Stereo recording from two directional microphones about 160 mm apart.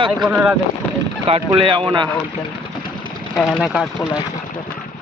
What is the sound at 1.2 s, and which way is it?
Speech, 35° right (ahead or behind).